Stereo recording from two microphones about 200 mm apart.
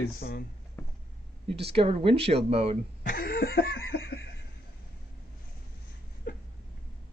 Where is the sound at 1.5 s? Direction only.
30° right (ahead or behind).